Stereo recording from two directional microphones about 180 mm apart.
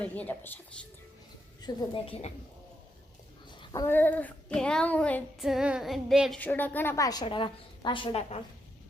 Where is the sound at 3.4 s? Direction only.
25° left (ahead or behind); by 5.4 s 5° left (ahead or behind).